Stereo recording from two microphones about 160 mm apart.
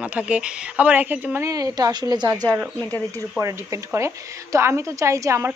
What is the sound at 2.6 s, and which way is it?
A woman's voice, 15° right (ahead or behind).